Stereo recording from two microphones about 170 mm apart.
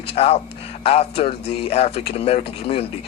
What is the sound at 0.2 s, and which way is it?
A man's voice, 35° left (ahead or behind).